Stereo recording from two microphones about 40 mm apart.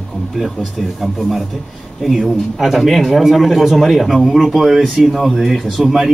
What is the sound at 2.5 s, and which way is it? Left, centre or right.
A man's voice, centre.